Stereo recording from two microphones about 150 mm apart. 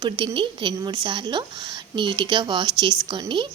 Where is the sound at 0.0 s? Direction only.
30° right (ahead or behind).